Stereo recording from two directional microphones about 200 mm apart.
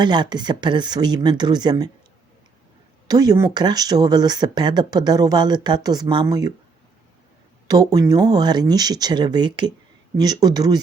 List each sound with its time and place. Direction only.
0.0 s speech: 20° right (ahead or behind)
3.1 s speech: 20° right (ahead or behind)
7.7 s speech: 20° right (ahead or behind)